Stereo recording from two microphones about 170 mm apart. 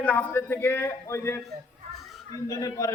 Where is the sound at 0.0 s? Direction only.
10° left (ahead or behind).